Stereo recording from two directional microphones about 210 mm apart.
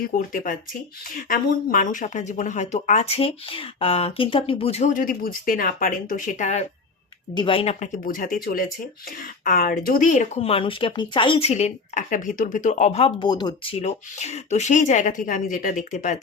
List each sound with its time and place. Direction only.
0.0 s speech: 40° left (ahead or behind)